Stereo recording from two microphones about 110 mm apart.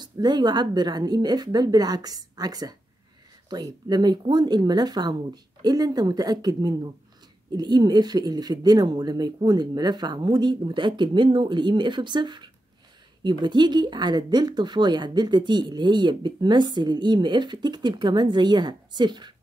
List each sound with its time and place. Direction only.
0.0 s speech: 40° right (ahead or behind)